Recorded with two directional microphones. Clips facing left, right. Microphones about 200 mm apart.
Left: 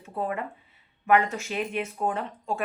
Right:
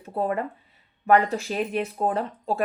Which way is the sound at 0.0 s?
35° right (ahead or behind).